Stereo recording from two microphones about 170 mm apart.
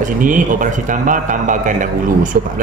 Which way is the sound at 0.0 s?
50° right (ahead or behind).